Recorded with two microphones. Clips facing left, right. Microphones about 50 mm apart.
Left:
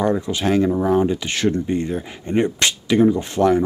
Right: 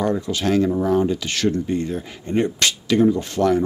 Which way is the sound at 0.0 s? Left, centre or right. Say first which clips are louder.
Left 2 dB; left.